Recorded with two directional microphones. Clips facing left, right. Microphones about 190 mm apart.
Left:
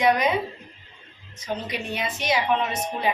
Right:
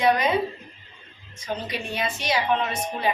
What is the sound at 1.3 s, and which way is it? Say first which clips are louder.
A woman's voice: even; 20° left (ahead or behind).